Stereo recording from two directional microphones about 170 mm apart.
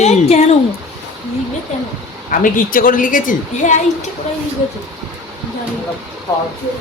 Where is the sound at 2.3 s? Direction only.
50° left (ahead or behind).